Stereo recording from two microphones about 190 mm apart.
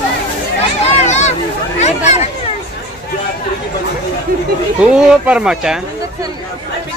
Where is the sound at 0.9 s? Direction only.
35° left (ahead or behind).